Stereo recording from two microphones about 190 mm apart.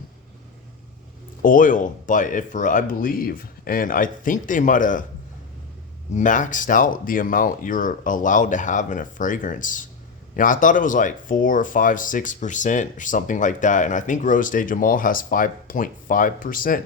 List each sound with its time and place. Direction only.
1.4 s speech: 45° left (ahead or behind)
6.1 s speech: 40° left (ahead or behind)